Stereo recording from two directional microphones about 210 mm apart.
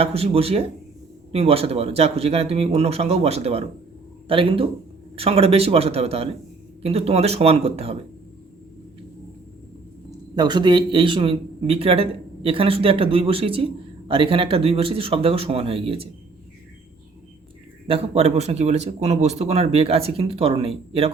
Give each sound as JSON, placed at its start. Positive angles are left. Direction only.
{"t": 0.0, "sound": "a man's voice", "side_deg": -30}
{"t": 10.3, "sound": "a man's voice", "side_deg": -20}
{"t": 17.8, "sound": "a man's voice", "side_deg": -30}